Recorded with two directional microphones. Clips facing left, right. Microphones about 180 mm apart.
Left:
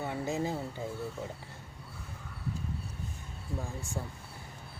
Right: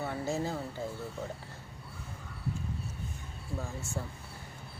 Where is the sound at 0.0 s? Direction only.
15° left (ahead or behind).